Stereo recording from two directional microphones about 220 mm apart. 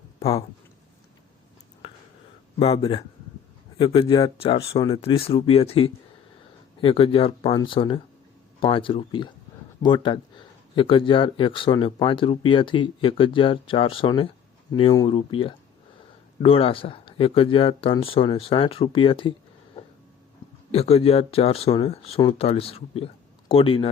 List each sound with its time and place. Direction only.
0.2 s speech: 25° left (ahead or behind)
2.6 s speech: 25° left (ahead or behind)
20.7 s speech: 25° left (ahead or behind)